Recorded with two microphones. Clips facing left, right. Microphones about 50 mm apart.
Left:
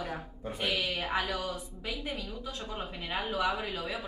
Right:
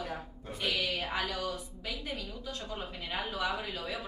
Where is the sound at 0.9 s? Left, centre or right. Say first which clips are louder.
Left 2 dB; centre.